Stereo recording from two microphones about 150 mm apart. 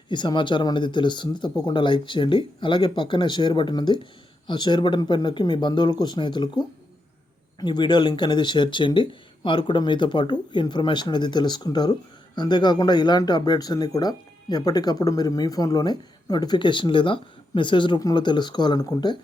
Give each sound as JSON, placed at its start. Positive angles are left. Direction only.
{"t": 0.1, "sound": "speech", "side_deg": 30}
{"t": 7.6, "sound": "speech", "side_deg": 30}